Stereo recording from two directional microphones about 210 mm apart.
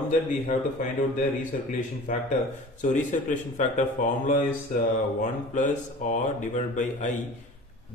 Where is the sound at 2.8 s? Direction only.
35° left (ahead or behind).